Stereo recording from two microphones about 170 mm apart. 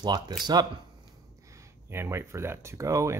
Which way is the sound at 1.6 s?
15° right (ahead or behind).